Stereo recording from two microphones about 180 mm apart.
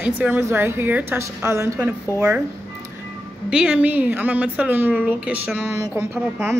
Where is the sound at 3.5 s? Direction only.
5° right (ahead or behind).